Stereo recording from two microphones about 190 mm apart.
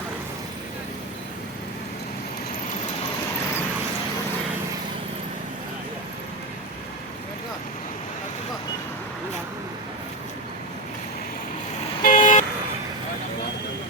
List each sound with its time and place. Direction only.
12.0 s vehicle: 40° left (ahead or behind)